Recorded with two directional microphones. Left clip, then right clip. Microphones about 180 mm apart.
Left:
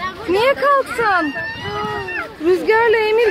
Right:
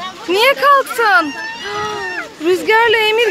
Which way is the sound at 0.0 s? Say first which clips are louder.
Right 3 dB; 10° right (ahead or behind).